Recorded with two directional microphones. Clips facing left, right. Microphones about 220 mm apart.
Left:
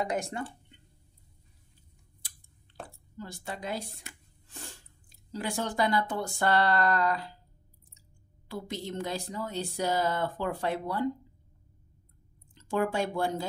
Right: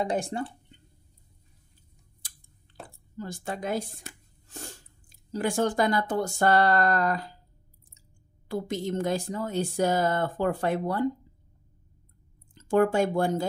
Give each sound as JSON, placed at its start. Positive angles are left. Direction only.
{"t": 0.0, "sound": "speech", "side_deg": -30}
{"t": 3.2, "sound": "a woman's voice", "side_deg": -45}
{"t": 8.5, "sound": "a woman's voice", "side_deg": -50}
{"t": 12.5, "sound": "speech", "side_deg": -50}